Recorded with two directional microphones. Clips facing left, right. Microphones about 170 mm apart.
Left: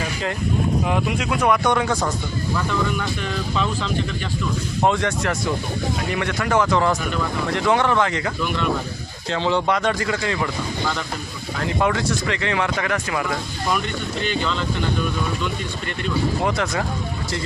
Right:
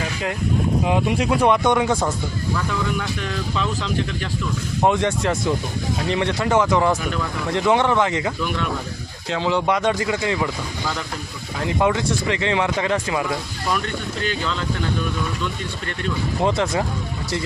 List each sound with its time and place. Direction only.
0.9 s speech: 20° right (ahead or behind)
4.8 s speech: 20° right (ahead or behind)
9.3 s speech: 5° right (ahead or behind)
9.6 s speech: 15° right (ahead or behind)
11.6 s speech: 20° right (ahead or behind)
16.4 s speech: 25° right (ahead or behind)